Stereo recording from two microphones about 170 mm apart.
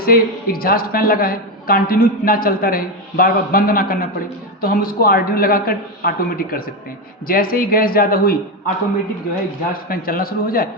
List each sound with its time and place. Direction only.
0.0 s a woman's voice: 60° left (ahead or behind)
9.9 s a woman's voice: 60° left (ahead or behind)